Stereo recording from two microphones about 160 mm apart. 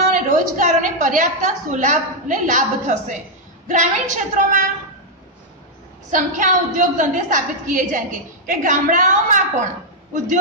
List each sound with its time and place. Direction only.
0.1 s a woman's voice: 50° right (ahead or behind)
6.1 s a woman's voice: 55° right (ahead or behind)